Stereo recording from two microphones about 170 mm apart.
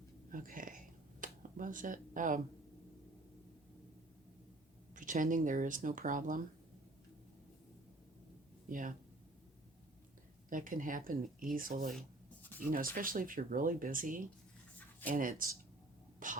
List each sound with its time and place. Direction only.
0.3 s a sound: 55° right (ahead or behind)
1.2 s speech: 50° right (ahead or behind)
4.9 s speech: 50° right (ahead or behind)
8.7 s speech: 50° right (ahead or behind)
10.5 s speech: 50° right (ahead or behind)
16.2 s sneeze: 50° right (ahead or behind)